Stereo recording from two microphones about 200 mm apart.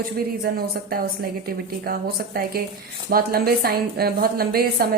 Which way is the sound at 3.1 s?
50° right (ahead or behind).